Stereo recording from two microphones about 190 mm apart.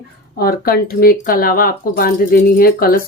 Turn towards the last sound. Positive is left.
turn(degrees=50)  # may be behind; listen again after turning